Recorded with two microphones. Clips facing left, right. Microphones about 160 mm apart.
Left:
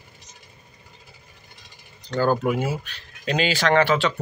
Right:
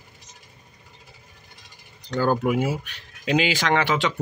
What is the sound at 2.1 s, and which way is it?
Speech, 10° right (ahead or behind).